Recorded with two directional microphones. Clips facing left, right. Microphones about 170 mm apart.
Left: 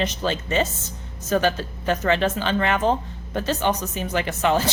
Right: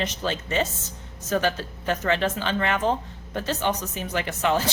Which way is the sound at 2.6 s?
25° left (ahead or behind).